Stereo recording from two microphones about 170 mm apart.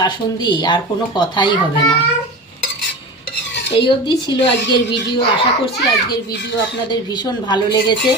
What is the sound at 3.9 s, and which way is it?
Speech, 30° left (ahead or behind).